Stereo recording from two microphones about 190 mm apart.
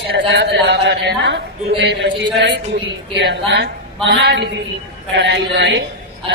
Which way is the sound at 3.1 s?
65° right (ahead or behind).